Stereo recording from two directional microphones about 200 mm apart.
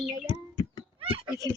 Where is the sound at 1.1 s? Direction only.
25° right (ahead or behind).